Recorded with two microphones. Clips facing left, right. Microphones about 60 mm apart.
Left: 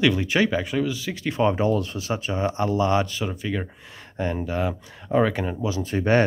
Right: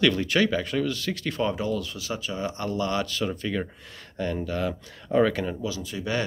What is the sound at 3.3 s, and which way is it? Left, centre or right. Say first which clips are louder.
Speech: even; centre.